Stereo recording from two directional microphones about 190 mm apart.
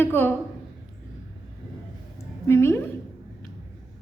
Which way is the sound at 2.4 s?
15° left (ahead or behind).